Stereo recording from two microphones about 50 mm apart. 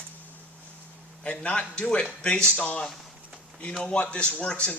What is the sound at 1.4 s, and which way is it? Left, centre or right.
Speech, left.